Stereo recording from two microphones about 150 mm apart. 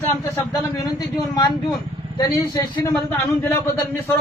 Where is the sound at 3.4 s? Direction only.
15° left (ahead or behind).